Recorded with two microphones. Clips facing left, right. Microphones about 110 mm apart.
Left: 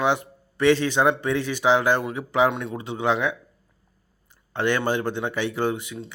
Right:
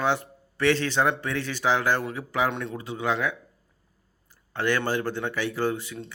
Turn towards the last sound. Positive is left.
turn(degrees=20)  # may be behind; listen again after turning